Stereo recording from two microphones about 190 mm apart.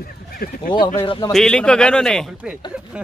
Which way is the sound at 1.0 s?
25° left (ahead or behind).